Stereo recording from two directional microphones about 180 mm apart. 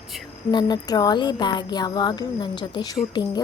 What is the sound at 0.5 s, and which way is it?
A woman's voice, 20° left (ahead or behind).